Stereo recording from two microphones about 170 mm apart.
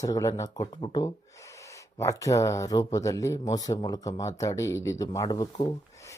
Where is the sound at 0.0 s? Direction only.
20° left (ahead or behind).